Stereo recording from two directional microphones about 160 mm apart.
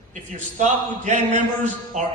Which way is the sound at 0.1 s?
50° right (ahead or behind).